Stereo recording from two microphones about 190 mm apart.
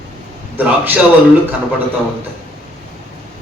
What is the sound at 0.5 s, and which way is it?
Speech, 10° right (ahead or behind).